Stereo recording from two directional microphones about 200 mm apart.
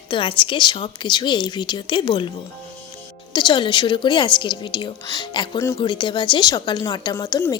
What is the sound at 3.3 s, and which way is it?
A woman's voice, 20° left (ahead or behind).